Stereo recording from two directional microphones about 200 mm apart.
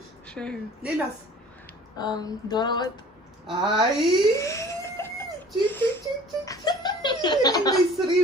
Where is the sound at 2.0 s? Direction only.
20° left (ahead or behind).